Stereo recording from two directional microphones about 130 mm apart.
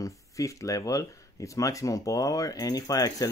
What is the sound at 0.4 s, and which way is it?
Speech, 25° left (ahead or behind).